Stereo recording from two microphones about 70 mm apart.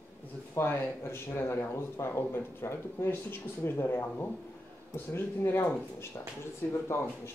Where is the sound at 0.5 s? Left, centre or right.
Left.